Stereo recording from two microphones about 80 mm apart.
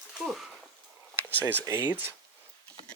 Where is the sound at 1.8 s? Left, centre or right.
Right.